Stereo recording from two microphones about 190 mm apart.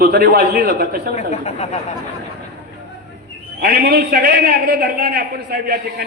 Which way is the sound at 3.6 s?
55° right (ahead or behind).